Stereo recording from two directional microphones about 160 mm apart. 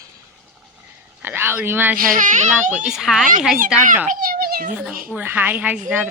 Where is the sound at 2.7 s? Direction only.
5° right (ahead or behind).